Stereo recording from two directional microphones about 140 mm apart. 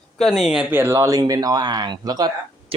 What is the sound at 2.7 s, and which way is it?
Speech, 40° right (ahead or behind).